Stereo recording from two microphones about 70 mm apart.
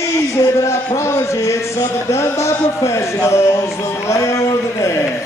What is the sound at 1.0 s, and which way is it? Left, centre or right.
Speech, left.